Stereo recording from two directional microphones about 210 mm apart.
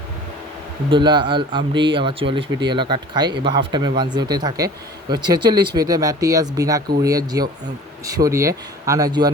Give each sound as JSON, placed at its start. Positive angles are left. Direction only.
{"t": 0.9, "sound": "a man's voice", "side_deg": -20}